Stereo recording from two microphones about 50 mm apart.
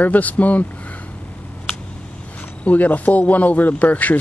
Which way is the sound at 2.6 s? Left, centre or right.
Left.